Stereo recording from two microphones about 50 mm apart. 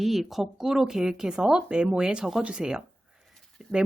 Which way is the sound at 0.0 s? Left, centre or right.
Centre.